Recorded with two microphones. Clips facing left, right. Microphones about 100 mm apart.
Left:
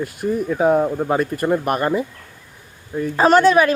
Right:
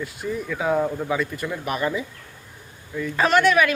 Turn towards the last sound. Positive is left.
turn(degrees=35)  # may be behind; listen again after turning